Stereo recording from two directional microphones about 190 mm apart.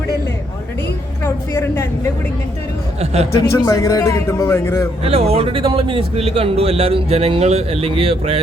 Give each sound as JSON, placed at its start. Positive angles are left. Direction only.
{"t": 1.2, "sound": "a woman's voice", "side_deg": 15}
{"t": 3.0, "sound": "speech", "side_deg": -35}
{"t": 3.5, "sound": "a man's voice", "side_deg": 15}
{"t": 5.0, "sound": "speech", "side_deg": -30}